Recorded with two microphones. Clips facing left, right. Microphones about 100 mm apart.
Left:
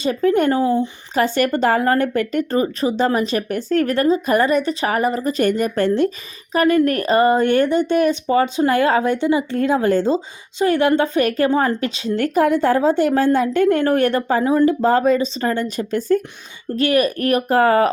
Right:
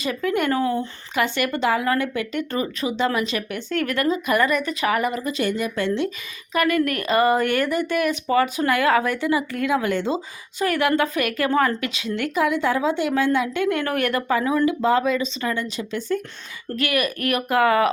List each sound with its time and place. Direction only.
0.0 s speech: 35° left (ahead or behind)
6.5 s a woman's voice: 35° left (ahead or behind)
16.7 s speech: 30° left (ahead or behind)